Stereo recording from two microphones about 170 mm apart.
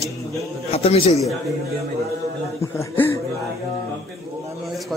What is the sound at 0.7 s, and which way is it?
Speech, 35° left (ahead or behind).